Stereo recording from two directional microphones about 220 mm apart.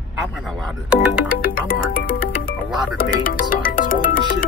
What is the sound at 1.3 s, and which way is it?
Music, 40° left (ahead or behind).